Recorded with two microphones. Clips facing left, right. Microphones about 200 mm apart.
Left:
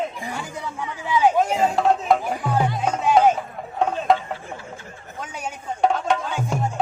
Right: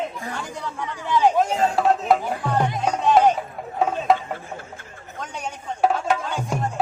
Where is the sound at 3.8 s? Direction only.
Centre (ahead or behind).